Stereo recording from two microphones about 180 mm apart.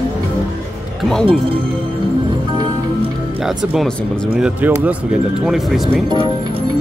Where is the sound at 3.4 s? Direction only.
5° right (ahead or behind).